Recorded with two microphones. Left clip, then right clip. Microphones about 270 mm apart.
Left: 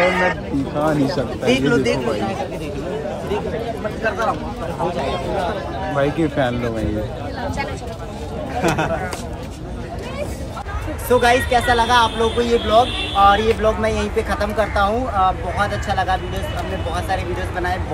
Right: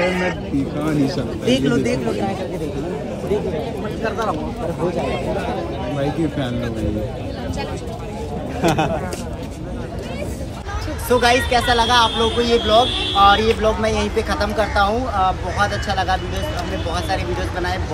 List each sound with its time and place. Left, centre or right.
0.0 s speech: left
0.8 s speech: centre
3.8 s speech: centre
8.5 s speech: centre
11.1 s speech: centre